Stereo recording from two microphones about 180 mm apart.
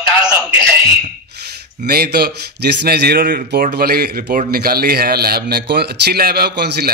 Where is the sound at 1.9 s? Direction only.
60° right (ahead or behind).